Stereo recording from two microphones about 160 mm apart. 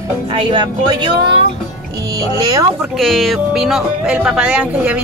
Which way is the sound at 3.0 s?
Centre (ahead or behind).